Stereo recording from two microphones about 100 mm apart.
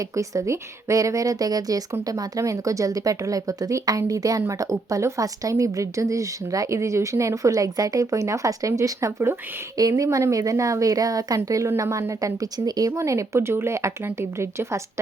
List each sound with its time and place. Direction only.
0.2 s a woman's voice: 30° right (ahead or behind)